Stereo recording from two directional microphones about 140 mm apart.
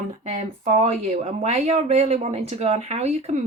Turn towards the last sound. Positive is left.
turn(degrees=-50)  # may be behind; listen again after turning